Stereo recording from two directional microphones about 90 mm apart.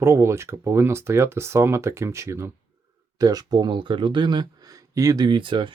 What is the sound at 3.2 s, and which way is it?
Speech, 45° right (ahead or behind).